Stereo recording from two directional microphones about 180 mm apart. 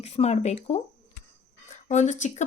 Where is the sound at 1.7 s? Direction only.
40° left (ahead or behind).